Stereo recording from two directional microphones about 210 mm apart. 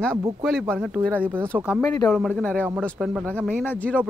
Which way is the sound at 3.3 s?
5° left (ahead or behind).